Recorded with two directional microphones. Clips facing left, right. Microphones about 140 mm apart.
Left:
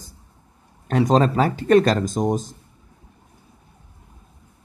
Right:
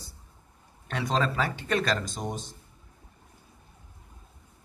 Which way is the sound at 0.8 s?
40° left (ahead or behind).